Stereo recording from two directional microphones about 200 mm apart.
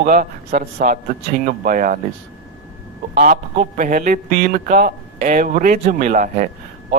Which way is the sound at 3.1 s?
40° right (ahead or behind).